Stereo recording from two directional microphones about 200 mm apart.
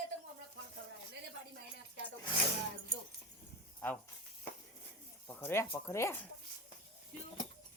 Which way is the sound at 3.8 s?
10° left (ahead or behind).